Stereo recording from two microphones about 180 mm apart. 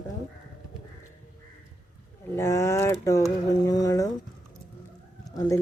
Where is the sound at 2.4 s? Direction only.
15° left (ahead or behind).